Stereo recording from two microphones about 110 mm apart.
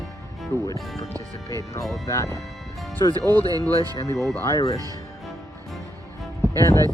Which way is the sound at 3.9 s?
30° left (ahead or behind).